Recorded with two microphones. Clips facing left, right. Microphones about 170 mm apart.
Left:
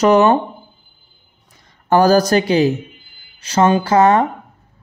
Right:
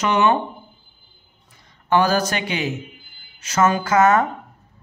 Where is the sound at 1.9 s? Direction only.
40° left (ahead or behind).